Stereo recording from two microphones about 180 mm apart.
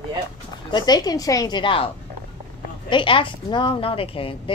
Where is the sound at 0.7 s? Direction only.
20° left (ahead or behind).